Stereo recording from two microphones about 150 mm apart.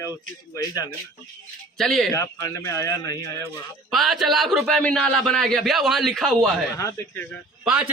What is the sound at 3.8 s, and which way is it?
A man's voice, centre (ahead or behind).